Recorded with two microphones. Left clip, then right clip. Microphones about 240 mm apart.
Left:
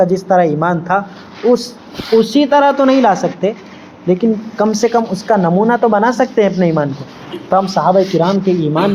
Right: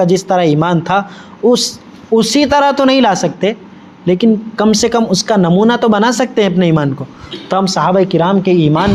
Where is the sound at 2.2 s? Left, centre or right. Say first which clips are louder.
Right 1 dB; right.